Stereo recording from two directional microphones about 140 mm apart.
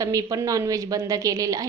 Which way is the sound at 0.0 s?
25° right (ahead or behind).